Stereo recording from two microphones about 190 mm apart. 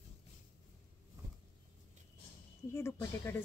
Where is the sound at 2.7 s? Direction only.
15° left (ahead or behind).